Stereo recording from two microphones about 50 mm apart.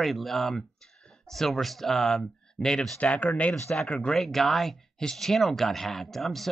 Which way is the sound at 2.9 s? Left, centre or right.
Left.